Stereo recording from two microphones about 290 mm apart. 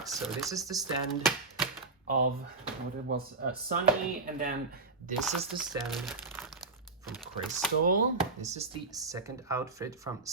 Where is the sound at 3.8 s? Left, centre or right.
Right.